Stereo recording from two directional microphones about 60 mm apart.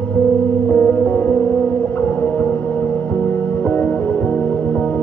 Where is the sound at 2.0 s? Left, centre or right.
Left.